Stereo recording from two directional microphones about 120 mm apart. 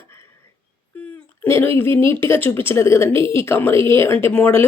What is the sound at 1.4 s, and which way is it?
A woman's voice, 20° left (ahead or behind).